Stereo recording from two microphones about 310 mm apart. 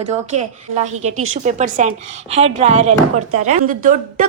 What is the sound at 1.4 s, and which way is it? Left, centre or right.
A woman's voice, right.